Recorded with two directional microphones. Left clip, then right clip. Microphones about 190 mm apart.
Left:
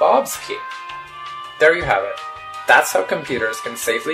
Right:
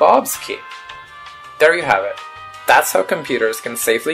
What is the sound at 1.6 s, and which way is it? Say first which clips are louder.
Speech: right 2 dB; 30° right (ahead or behind).